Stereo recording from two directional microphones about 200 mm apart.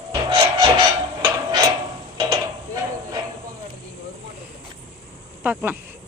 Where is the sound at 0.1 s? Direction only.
25° right (ahead or behind).